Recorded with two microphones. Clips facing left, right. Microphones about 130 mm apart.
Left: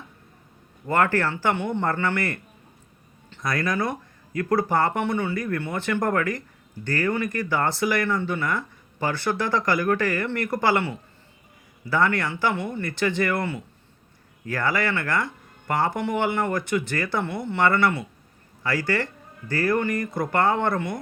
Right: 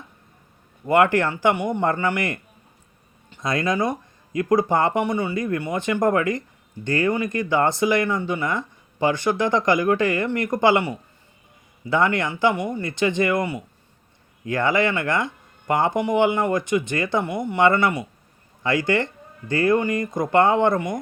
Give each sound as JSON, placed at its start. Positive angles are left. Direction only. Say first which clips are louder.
{"t": 0.9, "sound": "speech", "louder": "right 4 dB", "side_deg": -15}